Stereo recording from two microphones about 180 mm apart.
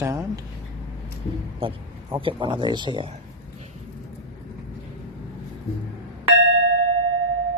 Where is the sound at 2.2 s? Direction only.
30° right (ahead or behind).